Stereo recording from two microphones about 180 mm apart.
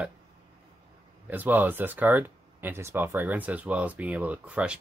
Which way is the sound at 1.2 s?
10° right (ahead or behind).